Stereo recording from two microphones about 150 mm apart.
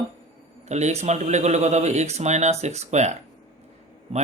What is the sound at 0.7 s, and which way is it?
Speech, 50° right (ahead or behind).